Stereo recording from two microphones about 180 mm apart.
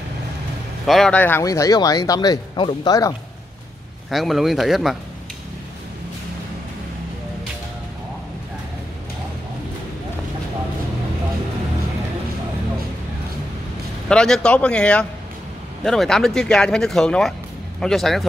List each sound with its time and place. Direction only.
0.8 s speech: centre (ahead or behind); by 3.2 s 20° left (ahead or behind)
4.1 s speech: centre (ahead or behind)
14.0 s speech: 5° left (ahead or behind)